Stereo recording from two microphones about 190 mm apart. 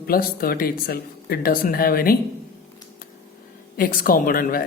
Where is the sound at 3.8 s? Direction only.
50° left (ahead or behind).